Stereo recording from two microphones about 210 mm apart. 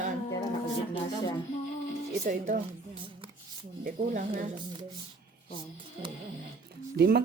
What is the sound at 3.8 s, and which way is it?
Speech, 40° right (ahead or behind).